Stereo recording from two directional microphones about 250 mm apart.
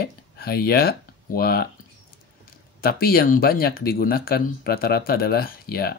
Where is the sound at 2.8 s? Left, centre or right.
Left.